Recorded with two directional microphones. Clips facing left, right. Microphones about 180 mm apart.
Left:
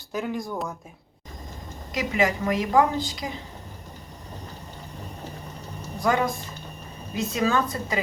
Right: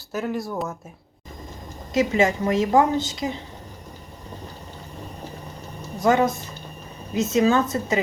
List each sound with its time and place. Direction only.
0.1 s speech: 5° right (ahead or behind)
1.9 s a woman's voice: 25° right (ahead or behind)
6.0 s a woman's voice: 25° right (ahead or behind)